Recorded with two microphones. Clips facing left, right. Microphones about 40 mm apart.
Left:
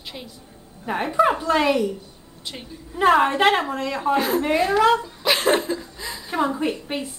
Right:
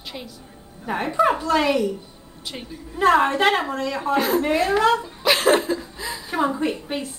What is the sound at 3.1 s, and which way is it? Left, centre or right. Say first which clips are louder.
A woman's voice: left 1 dB; centre.